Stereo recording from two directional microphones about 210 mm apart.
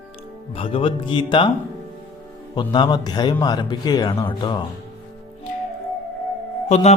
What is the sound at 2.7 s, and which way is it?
Speech, 20° left (ahead or behind).